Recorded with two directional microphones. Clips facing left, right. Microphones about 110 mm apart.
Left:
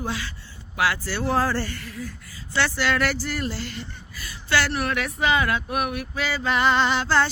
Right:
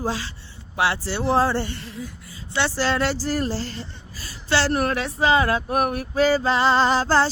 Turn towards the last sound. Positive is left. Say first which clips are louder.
# right 3 dB
turn(degrees=-35)  # may be behind; listen again after turning